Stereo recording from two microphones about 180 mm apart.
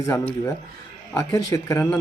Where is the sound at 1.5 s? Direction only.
15° left (ahead or behind).